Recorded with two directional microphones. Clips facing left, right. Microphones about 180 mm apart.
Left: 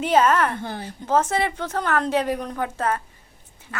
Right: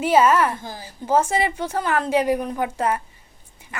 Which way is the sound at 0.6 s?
60° left (ahead or behind).